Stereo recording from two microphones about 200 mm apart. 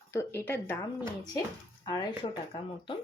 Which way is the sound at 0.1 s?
15° left (ahead or behind).